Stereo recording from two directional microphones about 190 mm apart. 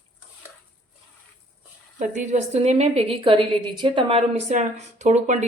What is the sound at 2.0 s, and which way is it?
Speech, 40° right (ahead or behind).